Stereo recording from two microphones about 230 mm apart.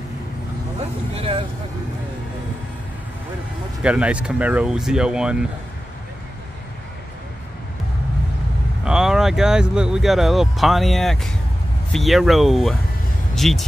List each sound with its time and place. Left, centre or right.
1.1 s vehicle: right
3.8 s speech: centre
8.8 s speech: centre